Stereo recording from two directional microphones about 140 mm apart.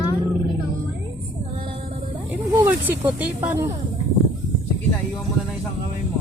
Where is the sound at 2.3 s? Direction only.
15° right (ahead or behind).